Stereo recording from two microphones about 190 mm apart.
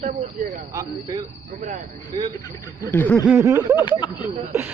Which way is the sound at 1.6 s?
40° right (ahead or behind).